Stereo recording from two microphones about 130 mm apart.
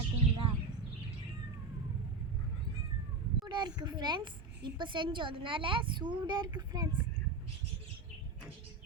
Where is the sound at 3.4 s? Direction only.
35° right (ahead or behind).